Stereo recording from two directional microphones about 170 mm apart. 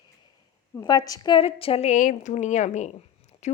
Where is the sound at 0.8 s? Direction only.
20° left (ahead or behind); by 3.5 s 45° left (ahead or behind).